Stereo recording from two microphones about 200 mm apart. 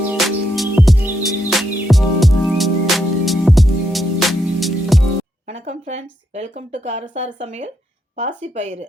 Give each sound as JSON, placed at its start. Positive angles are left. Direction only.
{"t": 0.2, "sound": "music", "side_deg": 0}
{"t": 5.5, "sound": "speech", "side_deg": -30}